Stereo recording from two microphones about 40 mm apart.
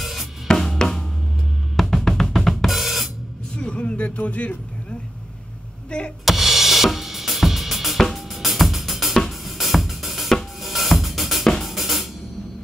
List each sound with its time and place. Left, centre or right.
0.0 s drum kit: centre
0.5 s drum kit: centre
3.5 s a sound: left
5.9 s speech: left
6.2 s drum kit: centre
8.3 s music: centre
9.4 s drum kit: centre
11.4 s drum kit: centre
11.7 s music: centre